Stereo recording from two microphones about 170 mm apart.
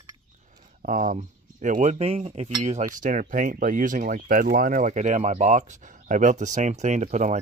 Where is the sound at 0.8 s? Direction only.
50° right (ahead or behind).